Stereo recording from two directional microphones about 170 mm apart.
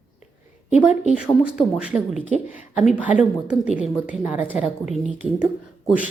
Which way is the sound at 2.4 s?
50° left (ahead or behind).